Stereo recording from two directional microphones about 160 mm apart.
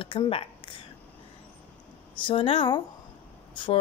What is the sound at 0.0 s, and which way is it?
Speech, 35° left (ahead or behind).